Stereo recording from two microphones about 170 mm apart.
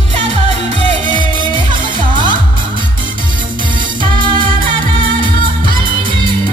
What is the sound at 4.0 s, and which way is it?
Music, 30° right (ahead or behind).